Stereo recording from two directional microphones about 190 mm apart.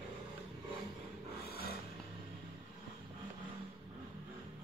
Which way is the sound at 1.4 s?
55° left (ahead or behind).